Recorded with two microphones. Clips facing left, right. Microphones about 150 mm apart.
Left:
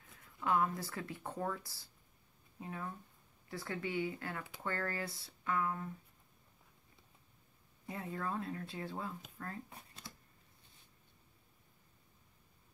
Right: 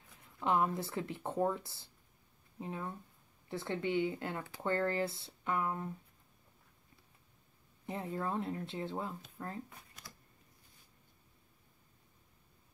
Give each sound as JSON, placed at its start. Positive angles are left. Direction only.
{"t": 0.1, "sound": "speech", "side_deg": -20}
{"t": 7.8, "sound": "speech", "side_deg": -25}
{"t": 9.7, "sound": "a sound", "side_deg": 30}